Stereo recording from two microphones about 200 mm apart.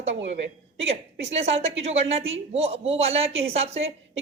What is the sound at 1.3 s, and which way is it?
A woman's voice, 30° right (ahead or behind).